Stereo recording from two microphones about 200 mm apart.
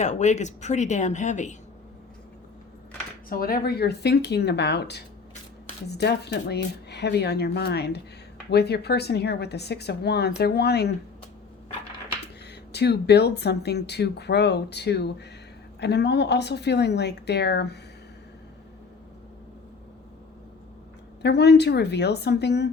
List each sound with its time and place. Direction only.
0.0 s speech: 35° left (ahead or behind)
3.2 s a woman's voice: 45° left (ahead or behind)
12.7 s a woman's voice: 55° left (ahead or behind)
21.2 s a woman's voice: 55° left (ahead or behind)